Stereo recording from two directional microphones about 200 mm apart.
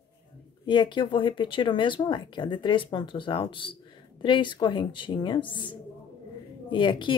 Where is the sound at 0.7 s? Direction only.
25° left (ahead or behind).